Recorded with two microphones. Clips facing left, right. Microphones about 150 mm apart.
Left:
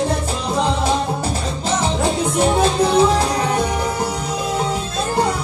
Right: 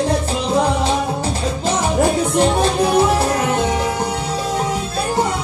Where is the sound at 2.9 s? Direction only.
15° right (ahead or behind).